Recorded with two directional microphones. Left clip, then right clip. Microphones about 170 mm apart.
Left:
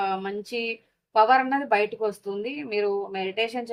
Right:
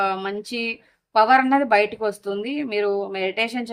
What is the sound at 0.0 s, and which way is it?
Speech, 50° right (ahead or behind).